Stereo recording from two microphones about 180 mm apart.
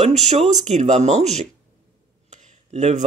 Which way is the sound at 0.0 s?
40° right (ahead or behind).